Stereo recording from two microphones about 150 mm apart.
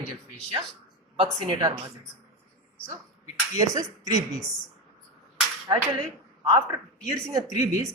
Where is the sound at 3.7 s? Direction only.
25° right (ahead or behind).